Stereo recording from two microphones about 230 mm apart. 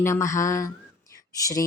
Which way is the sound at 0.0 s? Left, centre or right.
Centre.